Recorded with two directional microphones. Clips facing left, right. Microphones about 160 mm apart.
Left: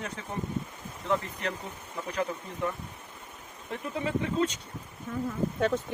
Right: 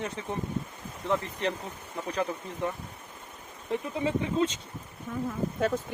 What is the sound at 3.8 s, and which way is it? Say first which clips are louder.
Speech: left 1 dB; 20° right (ahead or behind).